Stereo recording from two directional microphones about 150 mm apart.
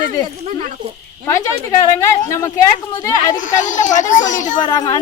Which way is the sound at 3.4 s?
55° left (ahead or behind).